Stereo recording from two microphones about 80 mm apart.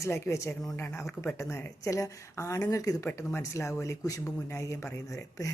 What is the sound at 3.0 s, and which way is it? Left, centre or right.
A woman's voice, left.